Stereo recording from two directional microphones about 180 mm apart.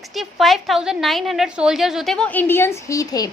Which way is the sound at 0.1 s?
Centre (ahead or behind).